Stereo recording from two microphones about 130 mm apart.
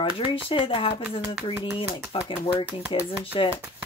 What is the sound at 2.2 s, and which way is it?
Speech, 35° left (ahead or behind).